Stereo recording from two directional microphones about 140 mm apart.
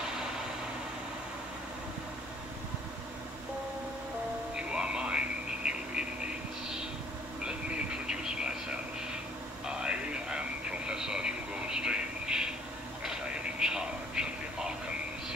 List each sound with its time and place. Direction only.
4.6 s radio: 5° right (ahead or behind)
7.4 s radio: 5° right (ahead or behind)
13.0 s a sound: 5° right (ahead or behind)